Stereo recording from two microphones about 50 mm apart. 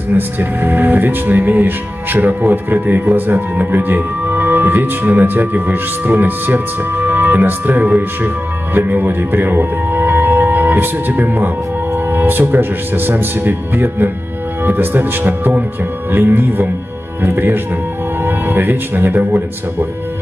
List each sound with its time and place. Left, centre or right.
0.1 s speech: right